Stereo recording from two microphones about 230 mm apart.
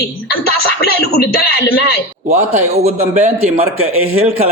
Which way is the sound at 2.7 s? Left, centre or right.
Right.